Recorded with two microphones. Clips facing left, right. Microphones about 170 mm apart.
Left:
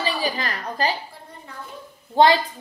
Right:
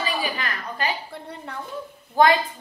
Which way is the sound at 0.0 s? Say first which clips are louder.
Left 2 dB; 35° left (ahead or behind).